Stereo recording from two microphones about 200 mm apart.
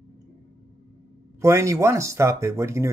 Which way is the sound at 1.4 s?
15° right (ahead or behind).